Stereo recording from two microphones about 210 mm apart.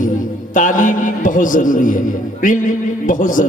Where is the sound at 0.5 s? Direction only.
40° left (ahead or behind).